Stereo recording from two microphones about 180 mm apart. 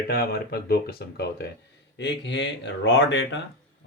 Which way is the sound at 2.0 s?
80° left.